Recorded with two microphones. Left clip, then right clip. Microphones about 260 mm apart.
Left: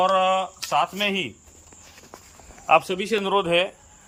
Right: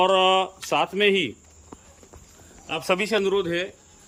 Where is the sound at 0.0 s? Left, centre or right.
Centre.